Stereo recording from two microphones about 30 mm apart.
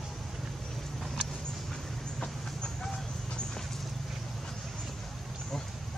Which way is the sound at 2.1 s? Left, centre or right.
Centre.